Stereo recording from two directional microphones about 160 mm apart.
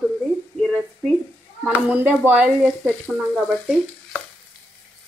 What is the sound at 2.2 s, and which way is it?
Speech, 10° right (ahead or behind).